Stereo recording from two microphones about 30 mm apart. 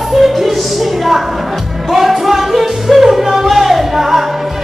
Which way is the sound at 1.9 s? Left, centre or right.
Centre.